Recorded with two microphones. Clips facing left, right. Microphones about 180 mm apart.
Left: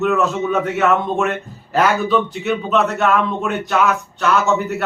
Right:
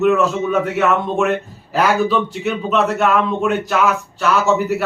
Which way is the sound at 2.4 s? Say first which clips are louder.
Even; centre (ahead or behind).